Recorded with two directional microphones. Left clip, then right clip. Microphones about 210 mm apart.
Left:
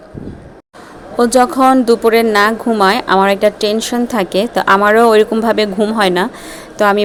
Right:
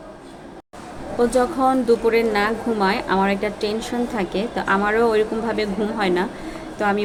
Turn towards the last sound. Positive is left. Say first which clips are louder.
# left 9 dB
turn(degrees=55)  # may be behind; listen again after turning